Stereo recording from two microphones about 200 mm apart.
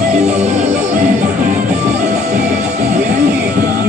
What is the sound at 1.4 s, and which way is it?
Music, 40° right (ahead or behind).